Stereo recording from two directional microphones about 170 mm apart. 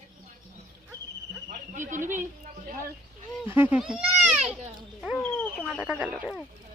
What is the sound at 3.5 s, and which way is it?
Speech, 10° right (ahead or behind).